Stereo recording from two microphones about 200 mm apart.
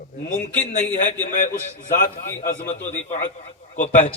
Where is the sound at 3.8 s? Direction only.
35° left (ahead or behind).